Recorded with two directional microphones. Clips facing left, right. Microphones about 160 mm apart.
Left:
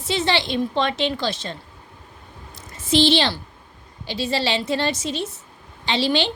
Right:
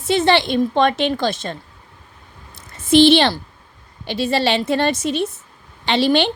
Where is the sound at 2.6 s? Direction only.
55° right (ahead or behind).